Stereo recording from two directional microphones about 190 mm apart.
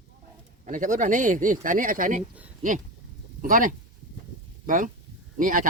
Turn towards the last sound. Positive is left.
turn(degrees=-45)  # may be behind; listen again after turning